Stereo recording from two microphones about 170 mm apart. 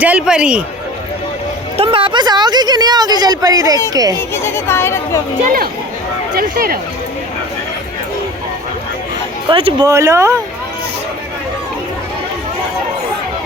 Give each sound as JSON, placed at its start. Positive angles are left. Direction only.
{"t": 0.0, "sound": "a man's voice", "side_deg": -5}
{"t": 1.7, "sound": "a woman's voice", "side_deg": -35}
{"t": 4.4, "sound": "speech", "side_deg": 15}
{"t": 6.3, "sound": "speech", "side_deg": -60}
{"t": 9.5, "sound": "speech", "side_deg": -30}
{"t": 9.8, "sound": "a man's voice", "side_deg": -15}